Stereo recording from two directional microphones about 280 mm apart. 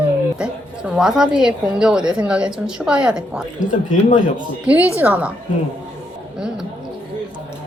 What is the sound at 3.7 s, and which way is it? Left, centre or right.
Speech, left.